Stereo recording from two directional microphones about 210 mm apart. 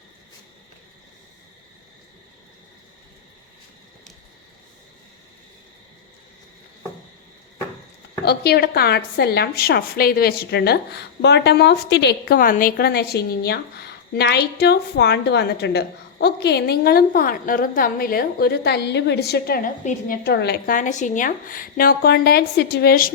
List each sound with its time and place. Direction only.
8.2 s a woman's voice: 50° left (ahead or behind)